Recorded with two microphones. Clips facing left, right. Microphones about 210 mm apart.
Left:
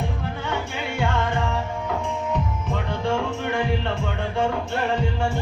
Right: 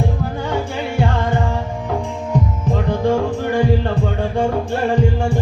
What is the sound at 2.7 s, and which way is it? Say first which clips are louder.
Music: right 7 dB; 40° right (ahead or behind).